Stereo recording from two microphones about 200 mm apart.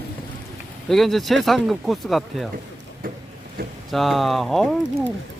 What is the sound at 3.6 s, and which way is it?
Speech, 50° right (ahead or behind).